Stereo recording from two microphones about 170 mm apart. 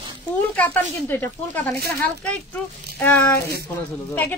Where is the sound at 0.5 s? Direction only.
10° left (ahead or behind).